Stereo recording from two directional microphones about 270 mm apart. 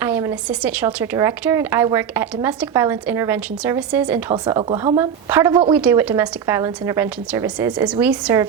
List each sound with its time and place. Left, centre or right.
0.0 s a woman's voice: centre
4.3 s a woman's voice: centre